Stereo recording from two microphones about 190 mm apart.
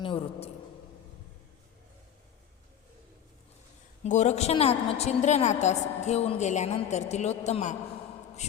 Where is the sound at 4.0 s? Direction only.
35° left (ahead or behind).